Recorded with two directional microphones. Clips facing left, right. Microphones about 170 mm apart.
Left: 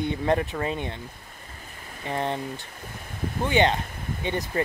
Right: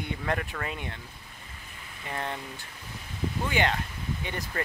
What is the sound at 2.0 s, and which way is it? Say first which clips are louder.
Speech: left 7 dB; 20° left (ahead or behind).